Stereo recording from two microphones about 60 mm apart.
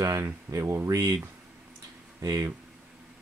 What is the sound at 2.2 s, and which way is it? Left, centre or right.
Speech, right.